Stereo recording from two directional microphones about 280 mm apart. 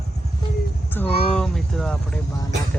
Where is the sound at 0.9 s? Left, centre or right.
Centre.